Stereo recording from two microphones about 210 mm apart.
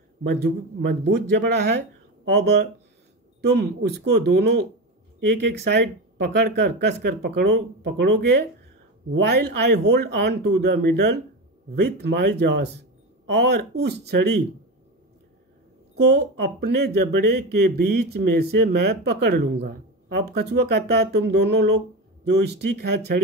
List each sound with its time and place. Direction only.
0.3 s speech: 55° right (ahead or behind)
16.1 s speech: 50° right (ahead or behind)